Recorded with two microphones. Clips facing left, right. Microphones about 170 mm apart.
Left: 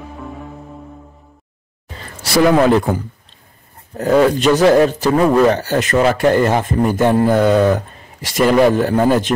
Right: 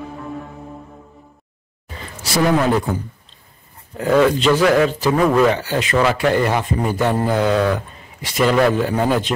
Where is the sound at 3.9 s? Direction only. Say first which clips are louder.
Left 2 dB; 45° left (ahead or behind).